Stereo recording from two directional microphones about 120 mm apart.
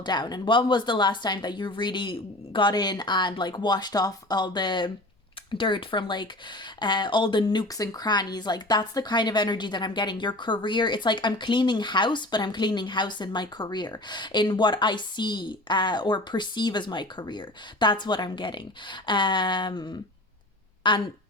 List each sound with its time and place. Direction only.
0.0 s speech: 35° left (ahead or behind)